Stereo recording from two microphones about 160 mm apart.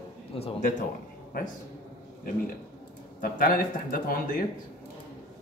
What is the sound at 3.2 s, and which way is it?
Speech, 60° left (ahead or behind).